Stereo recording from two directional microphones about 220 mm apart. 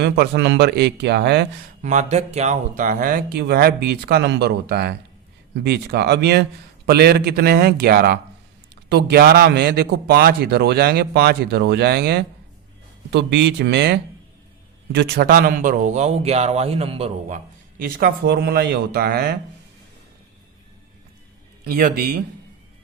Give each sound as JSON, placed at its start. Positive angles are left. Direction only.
{"t": 0.0, "sound": "a man's voice", "side_deg": -50}
{"t": 1.8, "sound": "a man's voice", "side_deg": -30}
{"t": 21.6, "sound": "a man's voice", "side_deg": -40}